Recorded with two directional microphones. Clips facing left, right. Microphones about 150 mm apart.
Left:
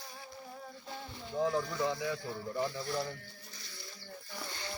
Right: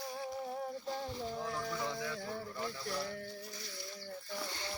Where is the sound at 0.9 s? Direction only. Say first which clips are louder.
Right 4 dB; 35° right (ahead or behind).